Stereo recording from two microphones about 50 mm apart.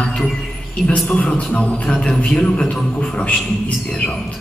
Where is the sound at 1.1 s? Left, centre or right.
Left.